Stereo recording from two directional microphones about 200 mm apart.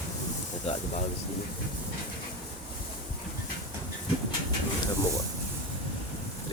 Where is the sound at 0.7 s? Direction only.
30° left (ahead or behind).